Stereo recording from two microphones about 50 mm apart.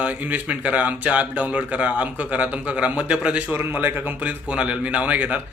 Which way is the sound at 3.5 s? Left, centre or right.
Right.